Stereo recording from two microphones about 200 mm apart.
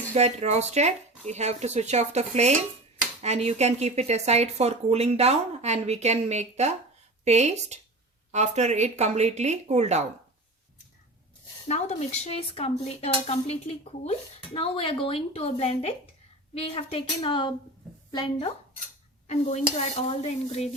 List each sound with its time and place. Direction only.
0.1 s speech: 35° right (ahead or behind)
11.7 s a woman's voice: 35° left (ahead or behind)